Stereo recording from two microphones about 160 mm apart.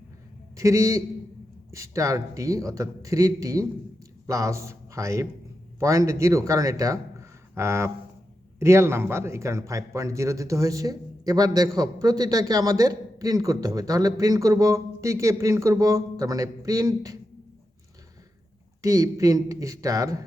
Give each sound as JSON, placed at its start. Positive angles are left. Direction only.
{"t": 0.5, "sound": "a man's voice", "side_deg": -20}
{"t": 18.8, "sound": "a man's voice", "side_deg": -20}